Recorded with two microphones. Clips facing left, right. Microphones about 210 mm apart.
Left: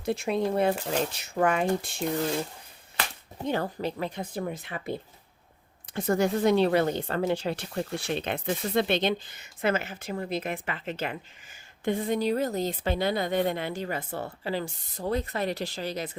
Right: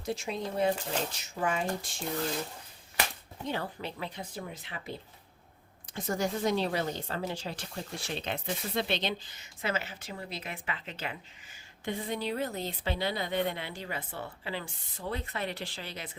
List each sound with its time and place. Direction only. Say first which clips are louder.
0.0 s speech: left 7 dB; 60° left (ahead or behind)
3.4 s speech: left 7 dB; 45° left (ahead or behind)